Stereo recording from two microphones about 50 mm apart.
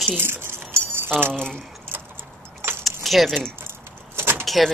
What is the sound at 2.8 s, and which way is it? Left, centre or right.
Keys jangling, centre.